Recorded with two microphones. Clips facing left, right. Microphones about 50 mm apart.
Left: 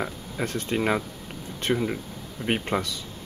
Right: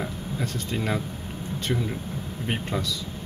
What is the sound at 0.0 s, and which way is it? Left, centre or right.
Speech, left.